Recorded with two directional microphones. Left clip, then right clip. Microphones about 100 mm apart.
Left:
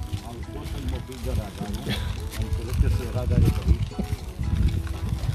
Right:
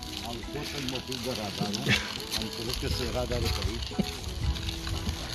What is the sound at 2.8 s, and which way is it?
Speech, 25° left (ahead or behind).